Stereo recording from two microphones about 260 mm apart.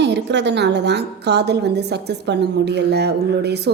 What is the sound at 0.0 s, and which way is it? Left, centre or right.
A woman's voice, right.